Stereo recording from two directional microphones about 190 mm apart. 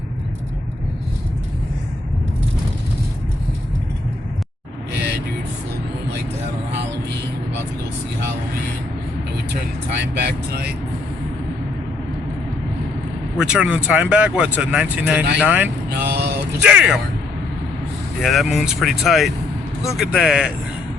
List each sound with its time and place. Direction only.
10.0 s vehicle: 60° right (ahead or behind)
13.3 s speech: 5° right (ahead or behind)
15.9 s vehicle: 60° right (ahead or behind)
16.6 s speech: 5° right (ahead or behind)
18.2 s speech: centre (ahead or behind)